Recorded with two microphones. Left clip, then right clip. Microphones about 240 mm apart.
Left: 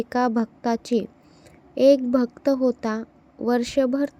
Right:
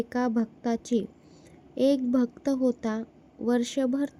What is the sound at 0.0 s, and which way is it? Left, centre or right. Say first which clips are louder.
A woman's voice: left 6 dB; centre.